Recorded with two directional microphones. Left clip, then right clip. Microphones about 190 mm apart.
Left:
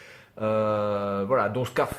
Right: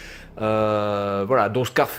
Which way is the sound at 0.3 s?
40° right (ahead or behind).